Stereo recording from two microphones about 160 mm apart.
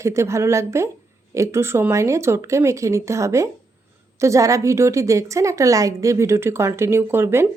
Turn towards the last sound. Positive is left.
turn(degrees=-15)  # may be behind; listen again after turning